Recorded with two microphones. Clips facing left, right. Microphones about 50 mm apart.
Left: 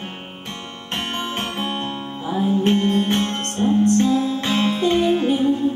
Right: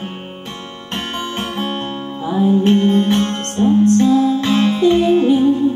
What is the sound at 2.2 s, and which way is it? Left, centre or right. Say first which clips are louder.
Music: right 6 dB; centre.